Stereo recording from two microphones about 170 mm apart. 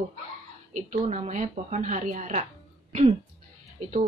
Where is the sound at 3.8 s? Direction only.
50° right (ahead or behind).